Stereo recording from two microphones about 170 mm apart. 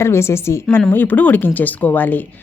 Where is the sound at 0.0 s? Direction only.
15° left (ahead or behind).